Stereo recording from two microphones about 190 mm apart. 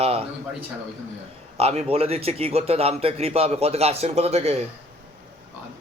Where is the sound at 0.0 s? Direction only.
30° right (ahead or behind).